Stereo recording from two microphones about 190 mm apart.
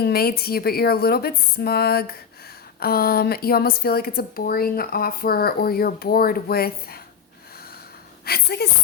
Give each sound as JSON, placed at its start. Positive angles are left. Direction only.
{"t": 0.0, "sound": "a woman's voice", "side_deg": 55}
{"t": 8.2, "sound": "speech", "side_deg": 55}